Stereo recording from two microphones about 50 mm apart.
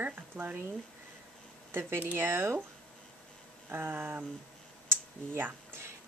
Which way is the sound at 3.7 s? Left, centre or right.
Right.